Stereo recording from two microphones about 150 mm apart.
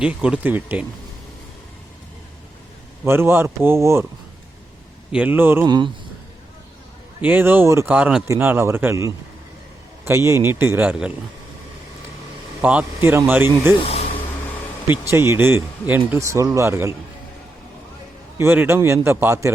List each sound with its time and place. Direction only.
0.0 s speech: 5° right (ahead or behind)
3.0 s speech: 15° right (ahead or behind)
5.1 s speech: 10° right (ahead or behind)
5.6 s speech: 30° right (ahead or behind)
7.2 s speech: 15° right (ahead or behind)
12.6 s speech: 10° right (ahead or behind)
13.8 s a sound: 45° left (ahead or behind)
14.8 s speech: 15° right (ahead or behind)
18.3 s speech: 15° right (ahead or behind)